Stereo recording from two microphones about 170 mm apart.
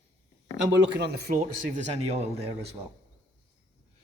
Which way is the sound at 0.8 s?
80° right.